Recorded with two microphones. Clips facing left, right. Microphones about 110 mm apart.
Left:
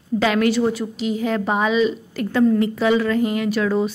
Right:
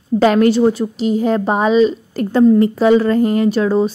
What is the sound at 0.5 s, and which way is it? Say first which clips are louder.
Speech: right 6 dB; 30° right (ahead or behind).